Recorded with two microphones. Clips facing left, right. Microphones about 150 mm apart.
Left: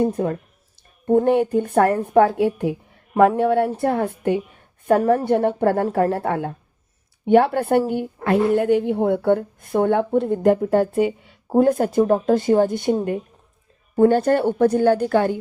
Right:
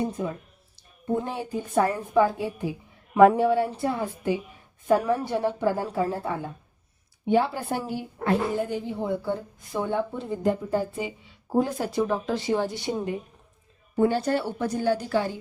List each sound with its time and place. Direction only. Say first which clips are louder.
0.0 s a woman's voice: left 8 dB; 60° left (ahead or behind)
3.2 s speech: left 1 dB; centre (ahead or behind)
3.5 s a woman's voice: left 5 dB; 60° left (ahead or behind)